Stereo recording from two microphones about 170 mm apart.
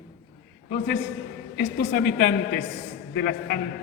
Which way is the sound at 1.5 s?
70° left (ahead or behind).